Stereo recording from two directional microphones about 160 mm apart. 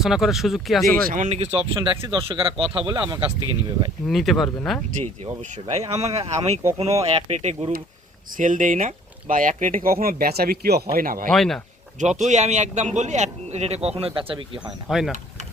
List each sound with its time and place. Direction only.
0.0 s speech: centre (ahead or behind)
1.0 s speech: 50° right (ahead or behind); by 3.2 s 30° right (ahead or behind)
4.0 s speech: centre (ahead or behind)
5.9 s a man's voice: 40° right (ahead or behind)
8.4 s speech: 55° right (ahead or behind); by 10.8 s 75° right (ahead or behind)
10.9 s speech: 60° right (ahead or behind)
11.3 s speech: 5° left (ahead or behind)
11.9 s a man's voice: 45° right (ahead or behind)
14.8 s speech: centre (ahead or behind)